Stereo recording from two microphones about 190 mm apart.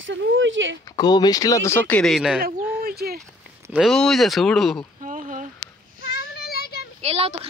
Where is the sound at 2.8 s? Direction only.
55° right (ahead or behind).